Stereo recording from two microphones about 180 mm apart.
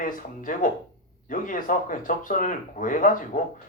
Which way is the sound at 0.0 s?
45° left (ahead or behind).